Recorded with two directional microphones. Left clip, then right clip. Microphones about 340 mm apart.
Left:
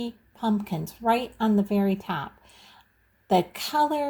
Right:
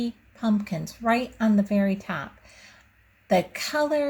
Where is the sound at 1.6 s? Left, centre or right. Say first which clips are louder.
Even; left.